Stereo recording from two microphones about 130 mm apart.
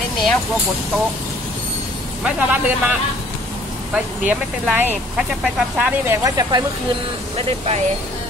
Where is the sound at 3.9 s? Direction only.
10° right (ahead or behind).